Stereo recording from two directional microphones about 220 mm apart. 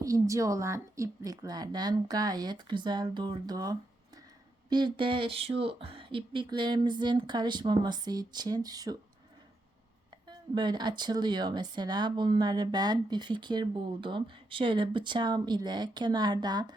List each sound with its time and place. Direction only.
0.0 s a woman's voice: 15° right (ahead or behind)
10.2 s speech: 20° right (ahead or behind)